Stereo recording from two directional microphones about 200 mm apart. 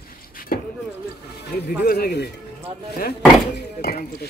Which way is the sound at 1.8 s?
50° left (ahead or behind).